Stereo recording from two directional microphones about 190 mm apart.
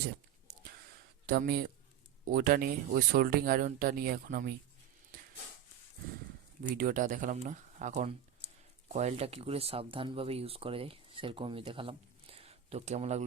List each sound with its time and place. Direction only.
1.3 s speech: 55° right (ahead or behind)
6.7 s speech: 45° right (ahead or behind)